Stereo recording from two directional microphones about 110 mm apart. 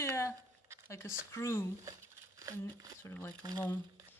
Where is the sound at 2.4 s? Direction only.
30° right (ahead or behind).